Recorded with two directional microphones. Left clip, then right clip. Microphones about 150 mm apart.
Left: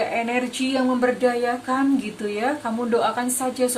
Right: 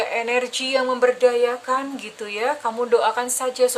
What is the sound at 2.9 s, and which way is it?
Speech, 30° right (ahead or behind).